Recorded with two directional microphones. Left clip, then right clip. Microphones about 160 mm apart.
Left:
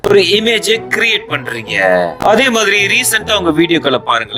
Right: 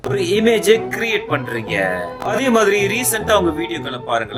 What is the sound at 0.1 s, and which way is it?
A man's voice, 50° left (ahead or behind).